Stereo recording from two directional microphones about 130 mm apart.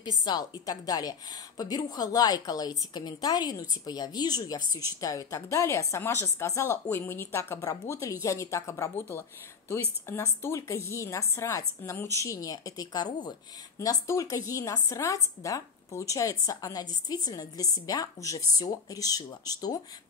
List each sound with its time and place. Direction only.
0.0 s a woman's voice: 30° left (ahead or behind)